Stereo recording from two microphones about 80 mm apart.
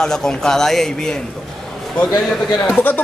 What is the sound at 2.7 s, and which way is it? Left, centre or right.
Speech, left.